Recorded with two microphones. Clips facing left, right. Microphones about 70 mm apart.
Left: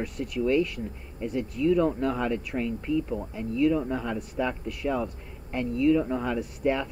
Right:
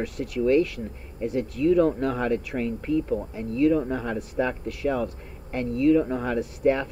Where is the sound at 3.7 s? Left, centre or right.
Right.